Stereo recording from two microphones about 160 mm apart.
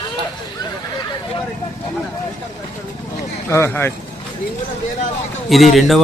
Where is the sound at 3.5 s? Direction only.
15° left (ahead or behind).